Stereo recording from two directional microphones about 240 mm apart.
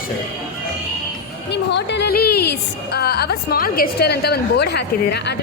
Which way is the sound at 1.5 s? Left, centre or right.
Left.